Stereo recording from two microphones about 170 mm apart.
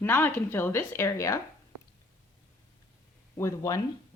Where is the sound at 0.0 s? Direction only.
10° left (ahead or behind).